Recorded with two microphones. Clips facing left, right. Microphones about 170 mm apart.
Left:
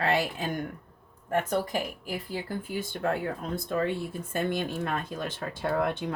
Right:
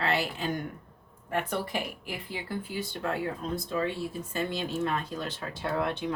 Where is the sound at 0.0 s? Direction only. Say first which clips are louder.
Left 2 dB; 50° left (ahead or behind).